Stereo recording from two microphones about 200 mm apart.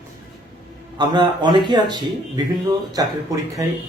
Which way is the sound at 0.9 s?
20° right (ahead or behind).